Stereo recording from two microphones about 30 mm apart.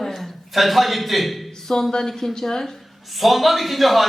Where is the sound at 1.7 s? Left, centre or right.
Left.